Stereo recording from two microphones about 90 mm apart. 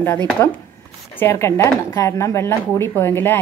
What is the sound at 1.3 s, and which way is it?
A woman's voice, 35° left (ahead or behind).